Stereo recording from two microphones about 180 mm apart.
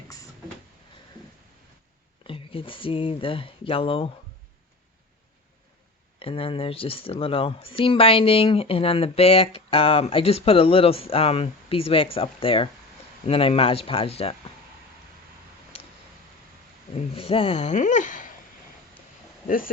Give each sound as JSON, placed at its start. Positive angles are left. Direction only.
{"t": 2.2, "sound": "speech", "side_deg": 30}
{"t": 6.1, "sound": "speech", "side_deg": 30}
{"t": 16.9, "sound": "speech", "side_deg": 30}
{"t": 19.5, "sound": "speech", "side_deg": 50}